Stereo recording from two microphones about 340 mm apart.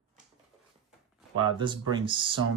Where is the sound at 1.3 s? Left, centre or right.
Centre.